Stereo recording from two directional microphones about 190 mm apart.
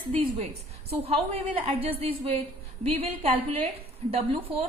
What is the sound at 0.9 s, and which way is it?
A woman's voice, 30° right (ahead or behind).